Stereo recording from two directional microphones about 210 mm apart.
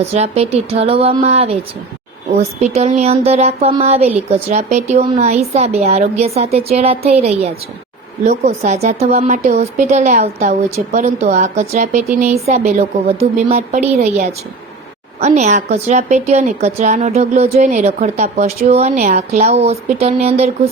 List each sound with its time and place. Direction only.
0.0 s a woman's voice: 30° right (ahead or behind)